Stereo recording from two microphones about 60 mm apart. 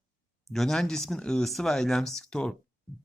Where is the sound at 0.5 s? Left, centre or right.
Centre.